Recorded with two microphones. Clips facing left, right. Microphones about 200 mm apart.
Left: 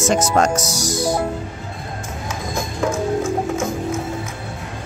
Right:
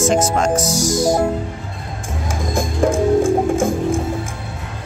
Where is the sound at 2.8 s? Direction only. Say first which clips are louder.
Right 6 dB; 30° right (ahead or behind).